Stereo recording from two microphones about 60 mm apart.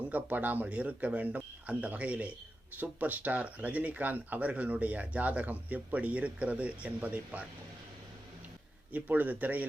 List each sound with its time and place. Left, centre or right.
0.1 s speech: right
8.9 s speech: right